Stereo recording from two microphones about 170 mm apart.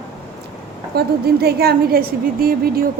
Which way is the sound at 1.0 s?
70° right (ahead or behind).